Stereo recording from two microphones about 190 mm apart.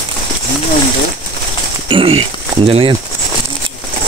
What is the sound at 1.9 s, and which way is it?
Speech, 30° right (ahead or behind).